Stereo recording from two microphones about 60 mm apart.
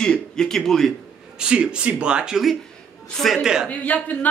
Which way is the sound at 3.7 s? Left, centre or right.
Left.